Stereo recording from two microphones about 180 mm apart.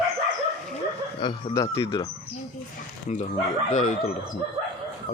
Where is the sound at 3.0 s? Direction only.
40° left (ahead or behind).